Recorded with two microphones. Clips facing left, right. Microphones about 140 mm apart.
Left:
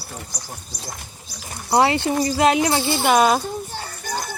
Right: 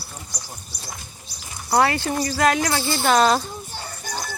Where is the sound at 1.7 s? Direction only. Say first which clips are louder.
Left 2 dB; 20° left (ahead or behind).